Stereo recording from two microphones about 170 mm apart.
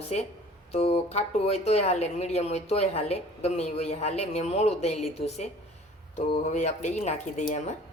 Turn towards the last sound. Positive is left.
turn(degrees=45)  # may be behind; listen again after turning